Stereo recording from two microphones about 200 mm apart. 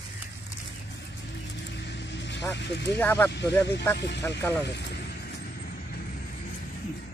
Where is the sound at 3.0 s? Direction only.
10° left (ahead or behind).